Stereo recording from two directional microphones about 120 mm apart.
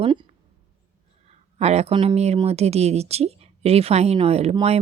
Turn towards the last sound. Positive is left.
turn(degrees=-60)  # may be behind; listen again after turning